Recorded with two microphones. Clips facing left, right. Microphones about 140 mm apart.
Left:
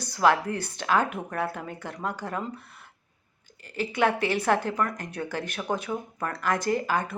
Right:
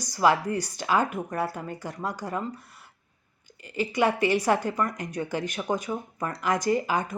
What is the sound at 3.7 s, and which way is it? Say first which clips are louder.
Speech: right 1 dB; 10° right (ahead or behind).